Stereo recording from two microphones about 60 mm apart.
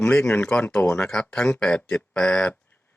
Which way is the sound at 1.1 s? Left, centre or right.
Centre.